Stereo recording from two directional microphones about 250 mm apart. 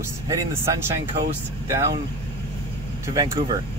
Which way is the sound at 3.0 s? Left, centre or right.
Centre.